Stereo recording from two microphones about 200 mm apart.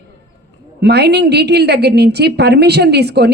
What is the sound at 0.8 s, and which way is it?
A woman's voice, 55° right (ahead or behind).